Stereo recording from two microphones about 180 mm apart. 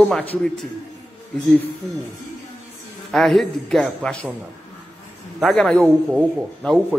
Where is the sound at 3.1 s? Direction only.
Centre (ahead or behind).